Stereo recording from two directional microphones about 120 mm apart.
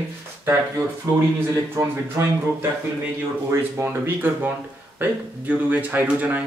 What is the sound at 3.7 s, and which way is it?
Speech, 20° right (ahead or behind).